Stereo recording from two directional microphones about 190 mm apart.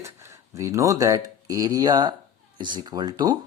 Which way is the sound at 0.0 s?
15° right (ahead or behind).